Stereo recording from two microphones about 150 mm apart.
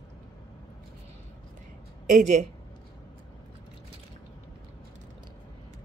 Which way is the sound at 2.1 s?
55° right (ahead or behind).